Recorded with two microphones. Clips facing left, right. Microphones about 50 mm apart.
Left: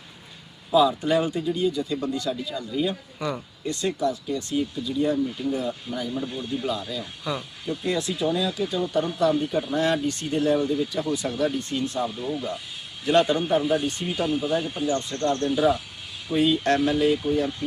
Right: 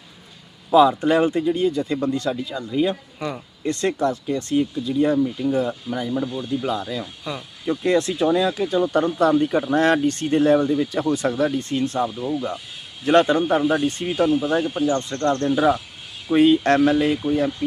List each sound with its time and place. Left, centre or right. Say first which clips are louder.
0.7 s speech: right 5 dB; right
2.3 s speech: right 4 dB; right
3.7 s speech: right 4 dB; right
7.9 s speech: right 7 dB; right
8.4 s speech: right 6 dB; right